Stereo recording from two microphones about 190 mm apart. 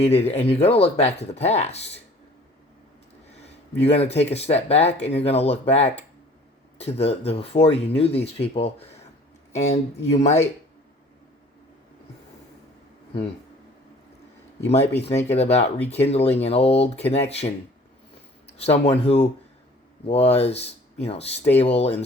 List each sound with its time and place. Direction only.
0.0 s speech: 30° left (ahead or behind)
3.4 s a sound: 35° left (ahead or behind)
4.1 s speech: 35° left (ahead or behind)
14.6 s speech: 35° left (ahead or behind)
18.5 s speech: 35° left (ahead or behind)